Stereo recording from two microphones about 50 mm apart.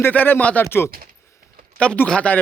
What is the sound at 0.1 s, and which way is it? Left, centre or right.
Speech, left.